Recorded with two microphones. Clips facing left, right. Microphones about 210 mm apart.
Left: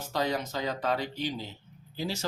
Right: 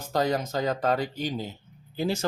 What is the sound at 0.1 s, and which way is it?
Speech, 45° right (ahead or behind).